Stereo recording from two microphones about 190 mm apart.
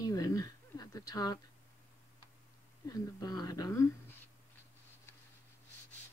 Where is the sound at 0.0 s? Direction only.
20° left (ahead or behind).